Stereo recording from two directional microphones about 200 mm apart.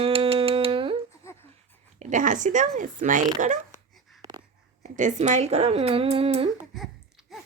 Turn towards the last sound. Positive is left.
turn(degrees=0)  # may be behind; listen again after turning